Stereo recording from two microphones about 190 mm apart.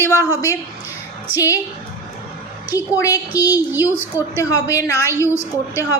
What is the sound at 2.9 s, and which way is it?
A woman's voice, 15° left (ahead or behind).